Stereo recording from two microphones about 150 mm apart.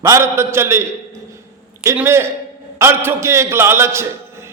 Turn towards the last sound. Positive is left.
turn(degrees=-15)  # may be behind; listen again after turning